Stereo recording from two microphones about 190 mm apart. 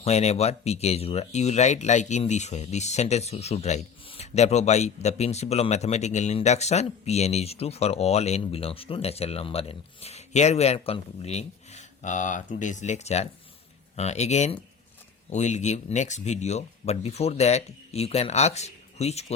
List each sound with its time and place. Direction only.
0.0 s speech: 35° left (ahead or behind)